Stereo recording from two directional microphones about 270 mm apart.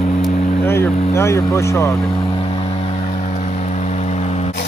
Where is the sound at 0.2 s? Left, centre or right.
Centre.